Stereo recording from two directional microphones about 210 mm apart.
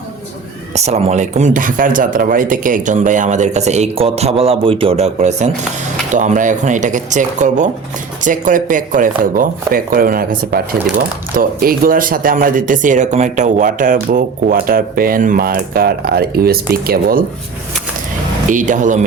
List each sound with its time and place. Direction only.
0.7 s speech: 30° right (ahead or behind)
18.4 s speech: 40° right (ahead or behind)